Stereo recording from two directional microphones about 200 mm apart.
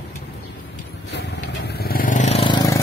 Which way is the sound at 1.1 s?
55° left (ahead or behind).